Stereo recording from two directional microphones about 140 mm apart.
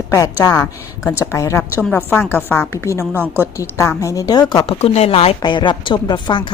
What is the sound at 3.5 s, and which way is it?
Speech, 20° left (ahead or behind).